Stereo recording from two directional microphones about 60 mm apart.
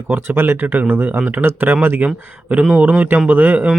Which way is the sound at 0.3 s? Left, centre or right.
Right.